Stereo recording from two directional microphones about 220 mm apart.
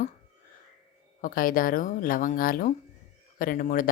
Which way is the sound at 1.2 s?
40° left (ahead or behind).